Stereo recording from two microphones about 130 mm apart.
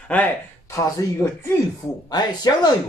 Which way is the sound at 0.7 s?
25° left (ahead or behind).